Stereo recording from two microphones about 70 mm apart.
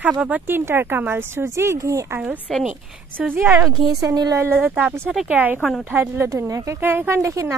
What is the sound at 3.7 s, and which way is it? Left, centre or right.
Speech, right.